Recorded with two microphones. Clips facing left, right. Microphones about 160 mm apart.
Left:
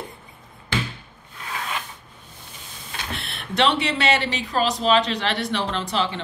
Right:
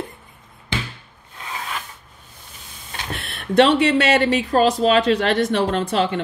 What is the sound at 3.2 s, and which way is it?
Speech, 45° right (ahead or behind).